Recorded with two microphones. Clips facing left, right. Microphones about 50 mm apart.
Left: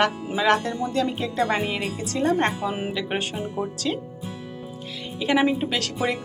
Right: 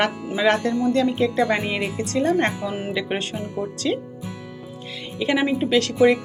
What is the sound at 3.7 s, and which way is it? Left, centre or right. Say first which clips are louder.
Speech: right 7 dB; centre.